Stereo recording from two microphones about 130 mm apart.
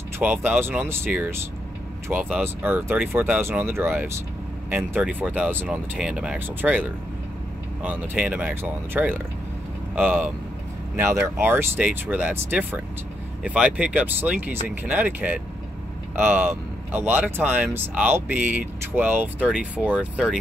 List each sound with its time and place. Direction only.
0.2 s speech: 15° right (ahead or behind)